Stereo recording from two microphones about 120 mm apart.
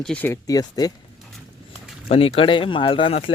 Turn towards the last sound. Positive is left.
turn(degrees=50)  # may be behind; listen again after turning